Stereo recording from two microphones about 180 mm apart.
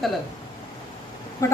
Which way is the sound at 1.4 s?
15° left (ahead or behind).